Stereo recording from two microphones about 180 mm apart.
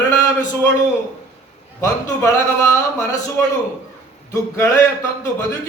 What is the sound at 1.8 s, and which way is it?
A man's voice, 20° left (ahead or behind).